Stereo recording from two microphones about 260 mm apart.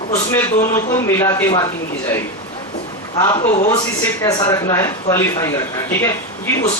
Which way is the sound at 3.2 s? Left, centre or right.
Centre.